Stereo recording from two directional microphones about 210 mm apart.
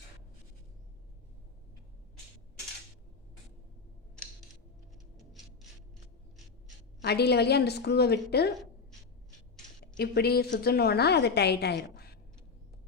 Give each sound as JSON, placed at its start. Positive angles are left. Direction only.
{"t": 7.0, "sound": "a woman's voice", "side_deg": 50}
{"t": 10.0, "sound": "a woman's voice", "side_deg": 50}